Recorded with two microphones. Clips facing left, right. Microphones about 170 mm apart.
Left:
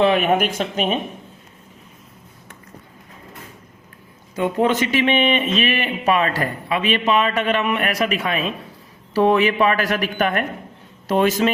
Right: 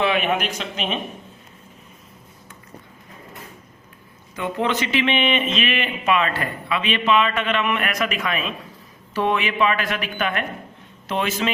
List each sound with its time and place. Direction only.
0.0 s speech: 40° left (ahead or behind)
4.4 s speech: 45° left (ahead or behind)